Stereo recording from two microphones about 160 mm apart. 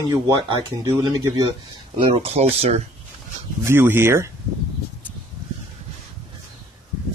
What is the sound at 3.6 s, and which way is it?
Speech, 15° right (ahead or behind).